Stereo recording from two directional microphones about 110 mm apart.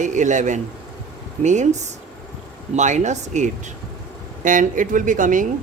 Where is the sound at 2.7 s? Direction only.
90° right.